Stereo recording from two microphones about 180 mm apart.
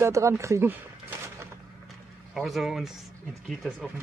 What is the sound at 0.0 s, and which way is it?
Speech, 15° right (ahead or behind).